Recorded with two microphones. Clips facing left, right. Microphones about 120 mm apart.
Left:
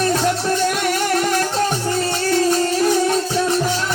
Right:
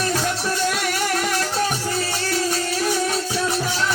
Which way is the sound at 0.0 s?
45° left (ahead or behind).